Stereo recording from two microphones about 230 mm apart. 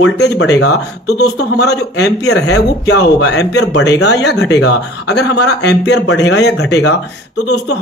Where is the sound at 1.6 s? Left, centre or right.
Left.